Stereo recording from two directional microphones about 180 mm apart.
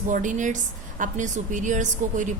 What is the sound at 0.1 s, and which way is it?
A woman's voice, 45° right (ahead or behind).